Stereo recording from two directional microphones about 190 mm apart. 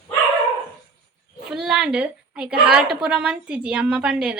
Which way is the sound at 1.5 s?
5° right (ahead or behind).